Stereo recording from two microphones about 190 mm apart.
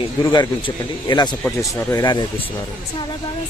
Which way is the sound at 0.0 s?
25° left (ahead or behind).